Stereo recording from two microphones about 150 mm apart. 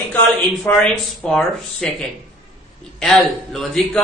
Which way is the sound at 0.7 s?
15° left (ahead or behind).